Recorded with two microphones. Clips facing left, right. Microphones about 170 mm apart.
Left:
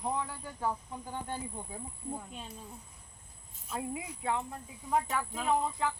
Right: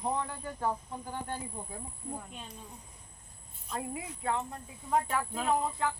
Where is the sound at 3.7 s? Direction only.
10° left (ahead or behind).